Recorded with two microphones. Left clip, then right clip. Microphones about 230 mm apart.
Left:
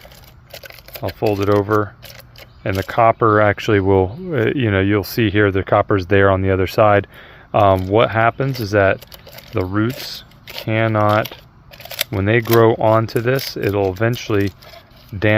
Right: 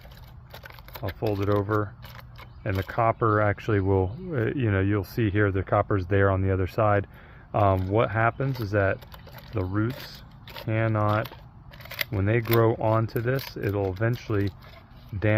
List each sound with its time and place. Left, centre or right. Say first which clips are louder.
1.3 s speech: left 10 dB; left